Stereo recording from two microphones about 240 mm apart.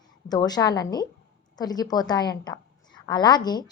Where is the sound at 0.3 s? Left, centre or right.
Centre.